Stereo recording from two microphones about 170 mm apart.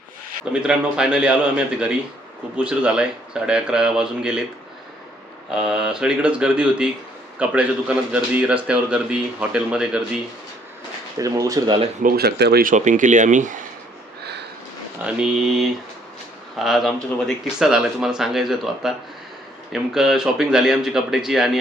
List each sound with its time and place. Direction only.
0.5 s speech: 5° right (ahead or behind)
5.5 s speech: 5° right (ahead or behind)
11.2 s speech: 20° right (ahead or behind)
12.0 s speech: 70° right (ahead or behind)
12.7 s speech: 45° right (ahead or behind)
14.2 s a sound: 75° right (ahead or behind)
15.0 s speech: 5° right (ahead or behind)